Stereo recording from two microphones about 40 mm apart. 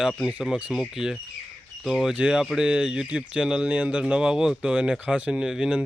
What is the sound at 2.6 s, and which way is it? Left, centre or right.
Speech, right.